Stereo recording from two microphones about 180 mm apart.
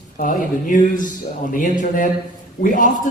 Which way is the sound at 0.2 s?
45° left (ahead or behind).